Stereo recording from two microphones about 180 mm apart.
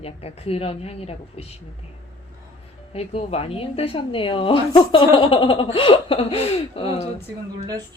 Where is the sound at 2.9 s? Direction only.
35° left (ahead or behind).